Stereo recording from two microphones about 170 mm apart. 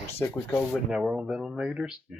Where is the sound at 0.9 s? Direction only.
5° right (ahead or behind).